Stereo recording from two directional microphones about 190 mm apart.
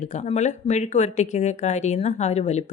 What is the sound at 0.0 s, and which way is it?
Speech, 40° left (ahead or behind).